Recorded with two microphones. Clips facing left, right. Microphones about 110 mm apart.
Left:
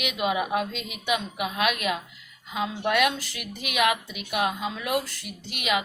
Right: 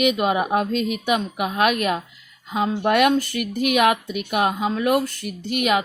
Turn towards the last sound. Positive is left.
turn(degrees=-50)  # may be behind; listen again after turning